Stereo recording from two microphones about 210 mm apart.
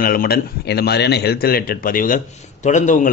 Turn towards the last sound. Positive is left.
turn(degrees=35)  # may be behind; listen again after turning